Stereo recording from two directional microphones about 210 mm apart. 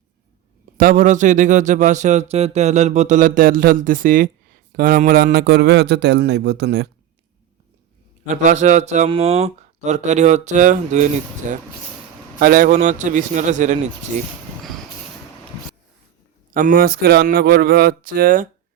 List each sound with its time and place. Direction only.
0.8 s a man's voice: 40° right (ahead or behind)
8.3 s speech: 35° right (ahead or behind)
16.6 s a man's voice: 40° right (ahead or behind)